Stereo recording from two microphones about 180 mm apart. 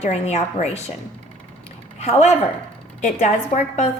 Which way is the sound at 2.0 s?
40° left (ahead or behind).